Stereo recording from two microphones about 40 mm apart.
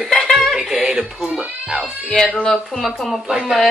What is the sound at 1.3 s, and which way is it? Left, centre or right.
Speech, right.